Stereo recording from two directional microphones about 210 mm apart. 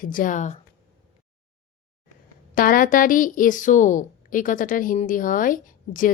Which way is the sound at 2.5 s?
40° left (ahead or behind).